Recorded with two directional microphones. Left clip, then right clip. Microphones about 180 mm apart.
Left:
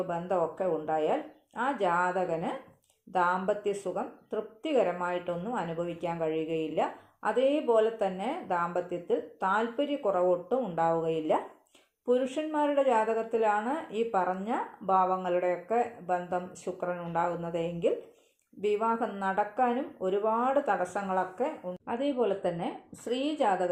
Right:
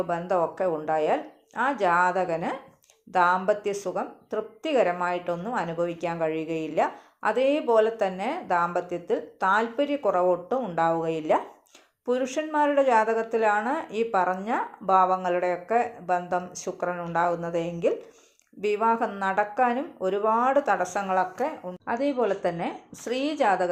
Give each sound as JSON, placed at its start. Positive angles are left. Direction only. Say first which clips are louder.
{"t": 0.1, "sound": "a woman's voice", "louder": "right 5 dB", "side_deg": -20}